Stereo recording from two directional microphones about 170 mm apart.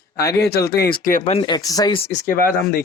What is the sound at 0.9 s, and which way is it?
Speech, 55° left (ahead or behind).